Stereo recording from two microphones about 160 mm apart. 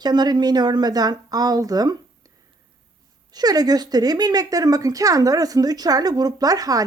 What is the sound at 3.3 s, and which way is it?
Speech, 25° right (ahead or behind).